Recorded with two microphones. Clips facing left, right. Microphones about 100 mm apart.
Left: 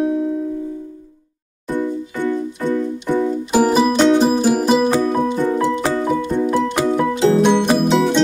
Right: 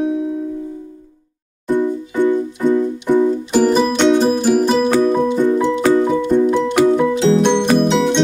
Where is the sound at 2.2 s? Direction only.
20° right (ahead or behind).